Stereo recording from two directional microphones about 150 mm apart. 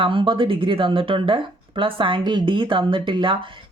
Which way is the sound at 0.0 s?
35° right (ahead or behind).